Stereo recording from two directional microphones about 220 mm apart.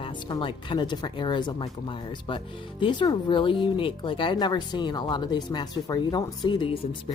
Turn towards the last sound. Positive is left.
turn(degrees=25)  # may be behind; listen again after turning